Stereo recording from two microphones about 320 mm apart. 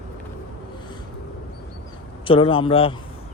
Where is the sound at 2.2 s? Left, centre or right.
Centre.